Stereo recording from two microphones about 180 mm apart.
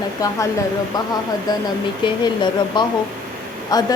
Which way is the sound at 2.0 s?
25° left (ahead or behind).